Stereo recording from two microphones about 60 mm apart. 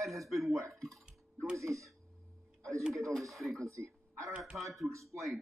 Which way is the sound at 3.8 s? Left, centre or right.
Right.